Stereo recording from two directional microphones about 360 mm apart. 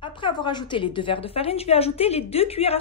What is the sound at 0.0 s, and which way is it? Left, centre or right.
A woman's voice, centre.